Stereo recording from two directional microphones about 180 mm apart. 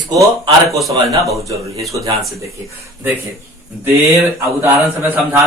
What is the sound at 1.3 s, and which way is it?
Speech, 20° right (ahead or behind).